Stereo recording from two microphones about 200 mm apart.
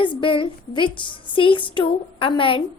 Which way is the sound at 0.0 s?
25° left (ahead or behind).